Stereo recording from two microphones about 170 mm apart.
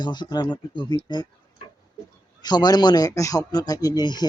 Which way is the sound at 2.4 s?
25° left (ahead or behind).